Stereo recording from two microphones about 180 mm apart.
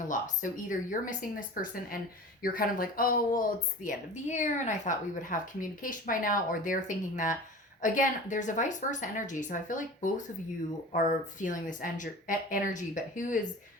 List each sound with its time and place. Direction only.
0.1 s speech: 45° left (ahead or behind)